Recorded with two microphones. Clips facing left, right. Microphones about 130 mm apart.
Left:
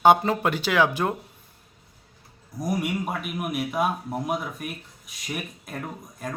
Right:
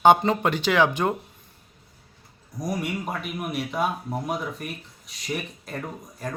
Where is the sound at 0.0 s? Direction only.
5° left (ahead or behind).